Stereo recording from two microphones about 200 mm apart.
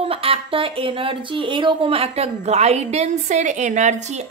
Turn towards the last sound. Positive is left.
turn(degrees=-35)  # may be behind; listen again after turning